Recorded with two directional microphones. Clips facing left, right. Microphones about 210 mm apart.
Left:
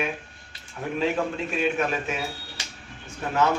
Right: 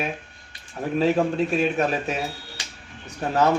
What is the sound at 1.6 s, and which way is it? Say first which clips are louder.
Speech: right 3 dB; 40° right (ahead or behind).